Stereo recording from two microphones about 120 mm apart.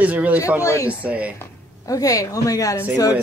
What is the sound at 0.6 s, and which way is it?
Speech, 25° left (ahead or behind).